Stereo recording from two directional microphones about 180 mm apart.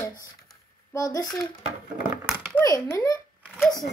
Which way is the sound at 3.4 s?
Centre (ahead or behind).